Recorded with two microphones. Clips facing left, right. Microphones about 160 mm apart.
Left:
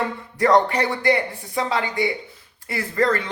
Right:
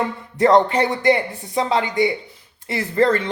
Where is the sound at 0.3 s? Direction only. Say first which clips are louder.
Right 3 dB; 25° right (ahead or behind).